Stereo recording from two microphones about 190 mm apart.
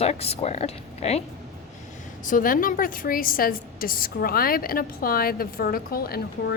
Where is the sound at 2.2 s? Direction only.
45° left (ahead or behind).